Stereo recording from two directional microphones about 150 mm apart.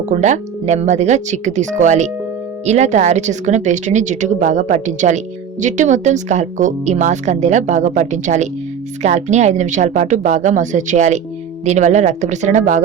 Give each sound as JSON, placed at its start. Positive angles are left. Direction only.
{"t": 0.1, "sound": "a woman's voice", "side_deg": -50}